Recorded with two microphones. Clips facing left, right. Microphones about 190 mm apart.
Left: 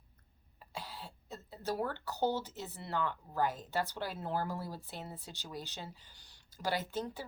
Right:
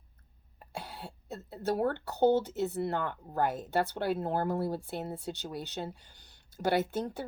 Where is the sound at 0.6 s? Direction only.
60° right (ahead or behind).